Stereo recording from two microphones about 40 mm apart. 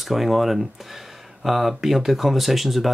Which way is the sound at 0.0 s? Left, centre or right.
Centre.